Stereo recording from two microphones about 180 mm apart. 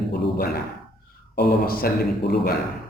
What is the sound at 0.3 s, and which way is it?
Speech, 55° left (ahead or behind).